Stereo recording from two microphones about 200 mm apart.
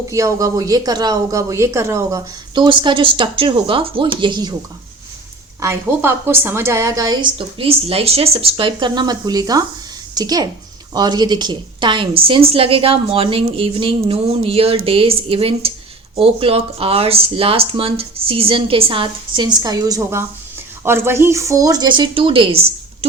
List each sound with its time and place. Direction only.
0.1 s a woman's voice: 15° right (ahead or behind)
5.5 s a woman's voice: 10° right (ahead or behind); by 23.0 s 30° right (ahead or behind)